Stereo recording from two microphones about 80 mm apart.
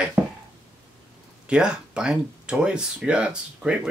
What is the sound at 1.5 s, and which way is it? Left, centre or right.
Speech, centre.